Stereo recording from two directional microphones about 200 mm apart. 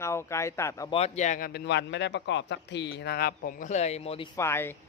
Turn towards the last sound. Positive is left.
turn(degrees=10)  # may be behind; listen again after turning